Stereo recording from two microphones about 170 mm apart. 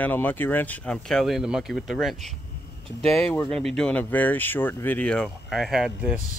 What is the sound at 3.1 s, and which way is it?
Speech, 15° left (ahead or behind).